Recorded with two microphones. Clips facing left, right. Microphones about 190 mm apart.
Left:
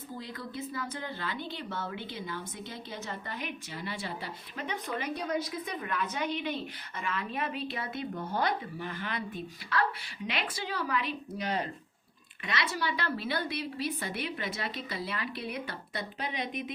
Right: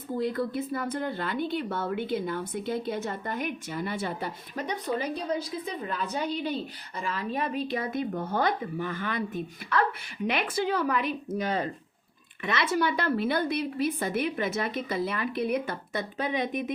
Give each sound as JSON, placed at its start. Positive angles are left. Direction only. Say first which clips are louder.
{"t": 0.2, "sound": "speech", "louder": "right 12 dB", "side_deg": -55}
{"t": 12.6, "sound": "speech", "louder": "right 8 dB", "side_deg": -50}